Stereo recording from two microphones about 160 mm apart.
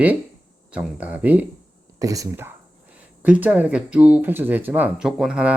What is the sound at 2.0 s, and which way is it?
Speech, 20° right (ahead or behind).